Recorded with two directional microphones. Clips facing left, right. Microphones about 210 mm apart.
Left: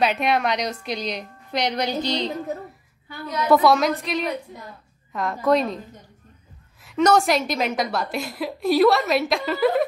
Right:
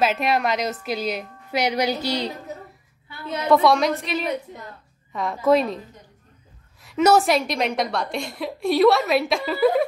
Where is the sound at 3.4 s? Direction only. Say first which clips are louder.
Even; 5° left (ahead or behind).